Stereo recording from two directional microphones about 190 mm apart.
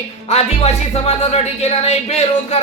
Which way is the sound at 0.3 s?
35° left (ahead or behind).